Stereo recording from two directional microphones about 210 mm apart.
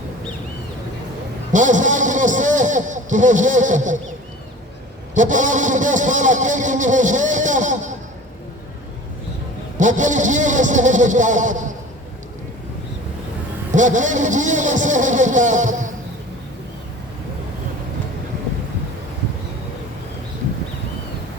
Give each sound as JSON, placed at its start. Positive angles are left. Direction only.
{"t": 1.5, "sound": "speech", "side_deg": -35}
{"t": 5.1, "sound": "speech", "side_deg": -35}
{"t": 9.7, "sound": "speech", "side_deg": -35}
{"t": 13.7, "sound": "speech", "side_deg": -35}